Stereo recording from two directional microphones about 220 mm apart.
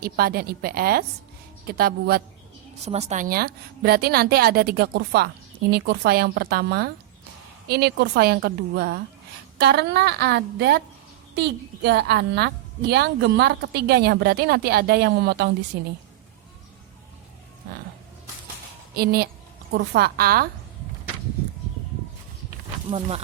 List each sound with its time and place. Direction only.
0.0 s a woman's voice: 45° right (ahead or behind)
2.8 s a woman's voice: 30° right (ahead or behind); by 15.9 s 55° right (ahead or behind)
18.9 s a woman's voice: 45° right (ahead or behind)
22.9 s speech: 25° right (ahead or behind)